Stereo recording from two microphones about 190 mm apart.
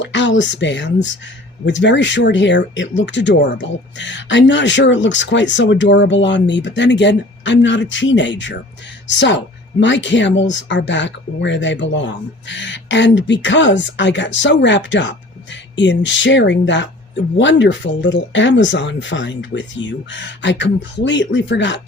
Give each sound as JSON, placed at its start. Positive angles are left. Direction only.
{"t": 0.0, "sound": "speech", "side_deg": 75}